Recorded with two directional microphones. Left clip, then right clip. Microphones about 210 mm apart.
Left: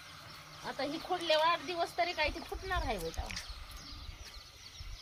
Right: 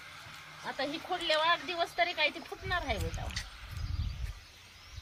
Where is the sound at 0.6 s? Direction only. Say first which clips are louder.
Right 2 dB; 5° right (ahead or behind).